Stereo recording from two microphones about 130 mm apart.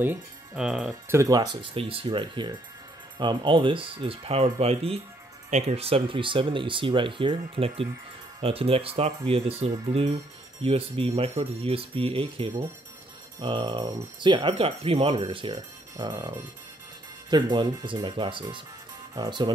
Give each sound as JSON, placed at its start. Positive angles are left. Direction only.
{"t": 0.6, "sound": "speech", "side_deg": -5}
{"t": 1.0, "sound": "speech", "side_deg": -25}